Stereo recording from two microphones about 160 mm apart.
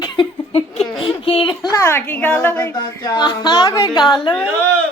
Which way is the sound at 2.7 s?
25° left (ahead or behind).